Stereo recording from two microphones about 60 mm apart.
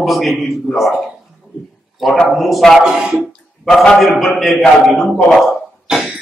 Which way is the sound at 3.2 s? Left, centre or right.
Centre.